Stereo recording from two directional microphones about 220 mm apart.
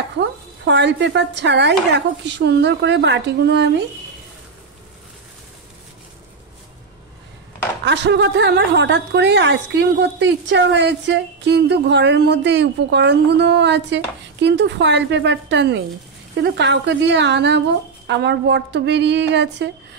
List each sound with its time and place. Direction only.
0.2 s a woman's voice: 55° right (ahead or behind)
7.8 s a woman's voice: 50° right (ahead or behind)